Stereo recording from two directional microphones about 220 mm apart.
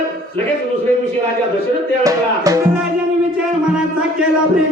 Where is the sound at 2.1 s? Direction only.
15° right (ahead or behind).